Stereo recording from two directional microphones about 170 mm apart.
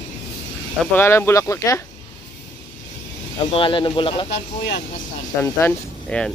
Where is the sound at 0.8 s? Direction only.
10° left (ahead or behind).